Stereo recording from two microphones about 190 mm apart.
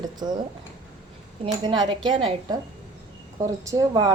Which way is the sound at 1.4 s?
25° right (ahead or behind).